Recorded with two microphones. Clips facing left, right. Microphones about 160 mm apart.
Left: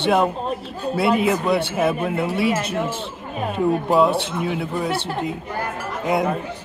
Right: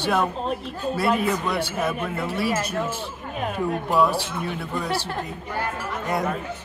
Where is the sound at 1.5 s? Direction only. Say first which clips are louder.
Left 6 dB; 25° left (ahead or behind).